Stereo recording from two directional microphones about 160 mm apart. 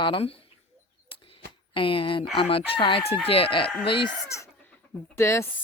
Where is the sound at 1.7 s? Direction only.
35° left (ahead or behind).